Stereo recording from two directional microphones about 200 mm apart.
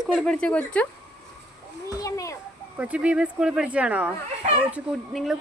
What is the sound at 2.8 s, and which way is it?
Speech, 5° right (ahead or behind).